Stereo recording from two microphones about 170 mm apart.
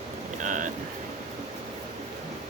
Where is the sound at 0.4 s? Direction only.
50° right (ahead or behind).